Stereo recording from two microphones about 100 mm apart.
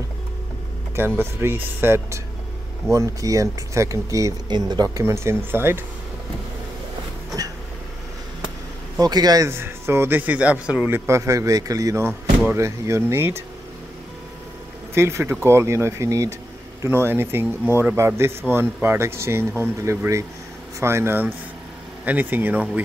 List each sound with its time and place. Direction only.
0.9 s speech: 20° right (ahead or behind)
2.9 s speech: 35° right (ahead or behind)
4.5 s speech: 45° right (ahead or behind)
5.0 s speech: 25° right (ahead or behind)
9.0 s speech: 40° right (ahead or behind)
9.5 s speech: 25° right (ahead or behind)
11.1 s speech: 30° right (ahead or behind)
15.0 s speech: 25° right (ahead or behind)